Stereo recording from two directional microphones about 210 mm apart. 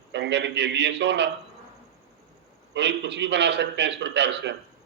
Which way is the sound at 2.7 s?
55° right (ahead or behind).